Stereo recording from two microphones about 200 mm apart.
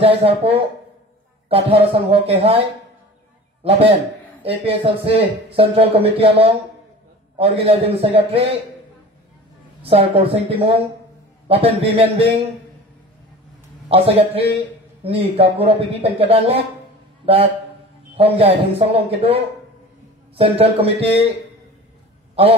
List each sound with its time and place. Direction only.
0.0 s speech: 30° right (ahead or behind)
3.6 s speech: 30° right (ahead or behind)
9.8 s speech: 30° right (ahead or behind)
13.8 s a man's voice: 30° right (ahead or behind)
20.3 s speech: 30° right (ahead or behind)
22.3 s a sound: 30° right (ahead or behind)